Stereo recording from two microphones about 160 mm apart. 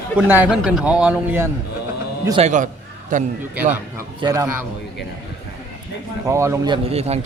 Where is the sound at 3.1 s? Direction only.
55° right (ahead or behind).